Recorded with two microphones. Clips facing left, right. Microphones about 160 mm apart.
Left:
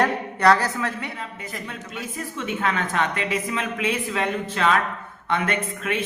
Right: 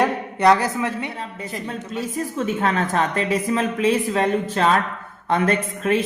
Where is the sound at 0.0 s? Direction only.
20° right (ahead or behind).